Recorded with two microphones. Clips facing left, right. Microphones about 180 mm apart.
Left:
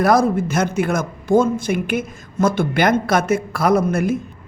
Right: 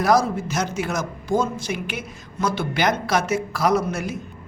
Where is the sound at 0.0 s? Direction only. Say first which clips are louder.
Left 4 dB; 55° left (ahead or behind).